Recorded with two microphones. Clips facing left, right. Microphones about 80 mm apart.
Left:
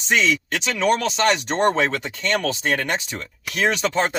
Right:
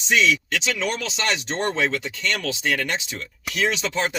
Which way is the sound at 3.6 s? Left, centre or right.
Left.